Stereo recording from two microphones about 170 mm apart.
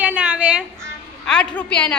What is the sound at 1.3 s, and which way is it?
Speech, 5° left (ahead or behind).